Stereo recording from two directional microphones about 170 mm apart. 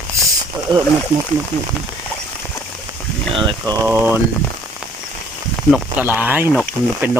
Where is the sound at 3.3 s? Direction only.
30° right (ahead or behind).